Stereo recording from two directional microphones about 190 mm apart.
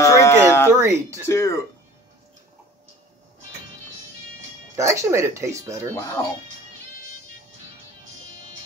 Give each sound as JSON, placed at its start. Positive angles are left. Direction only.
{"t": 0.0, "sound": "a sound", "side_deg": 15}
{"t": 0.7, "sound": "speech", "side_deg": -15}
{"t": 1.2, "sound": "speech", "side_deg": 15}
{"t": 4.7, "sound": "speech", "side_deg": -15}